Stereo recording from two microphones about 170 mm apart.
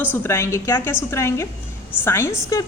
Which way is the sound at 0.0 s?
10° left (ahead or behind).